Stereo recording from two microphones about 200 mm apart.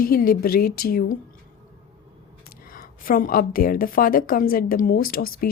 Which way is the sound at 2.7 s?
45° left (ahead or behind).